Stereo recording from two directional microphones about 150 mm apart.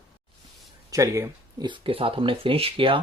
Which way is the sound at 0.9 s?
20° right (ahead or behind).